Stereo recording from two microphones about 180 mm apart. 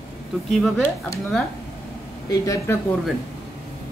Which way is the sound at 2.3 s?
15° left (ahead or behind).